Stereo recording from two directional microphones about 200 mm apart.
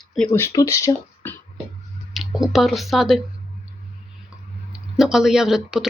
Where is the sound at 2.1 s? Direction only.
Centre (ahead or behind).